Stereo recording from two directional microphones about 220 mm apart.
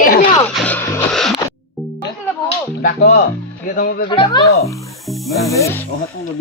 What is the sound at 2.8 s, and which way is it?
A man's voice, 40° left (ahead or behind).